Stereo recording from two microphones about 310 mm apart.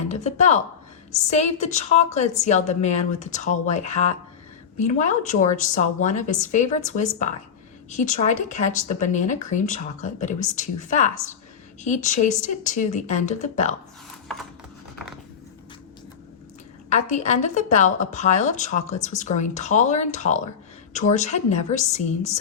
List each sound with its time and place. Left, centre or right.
0.1 s speech: left
16.9 s speech: left